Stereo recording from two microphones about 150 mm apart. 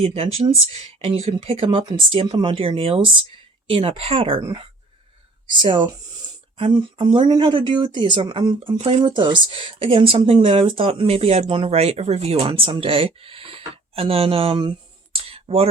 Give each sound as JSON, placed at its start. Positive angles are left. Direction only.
{"t": 0.0, "sound": "speech", "side_deg": -40}
{"t": 5.5, "sound": "speech", "side_deg": -35}
{"t": 15.1, "sound": "a sound", "side_deg": -40}